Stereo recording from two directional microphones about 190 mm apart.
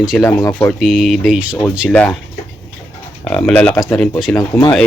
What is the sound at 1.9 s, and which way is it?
Speech, 5° left (ahead or behind).